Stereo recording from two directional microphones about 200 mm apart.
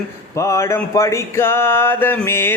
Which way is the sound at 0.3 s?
15° left (ahead or behind).